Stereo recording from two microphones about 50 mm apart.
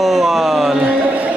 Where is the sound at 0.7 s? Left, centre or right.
Right.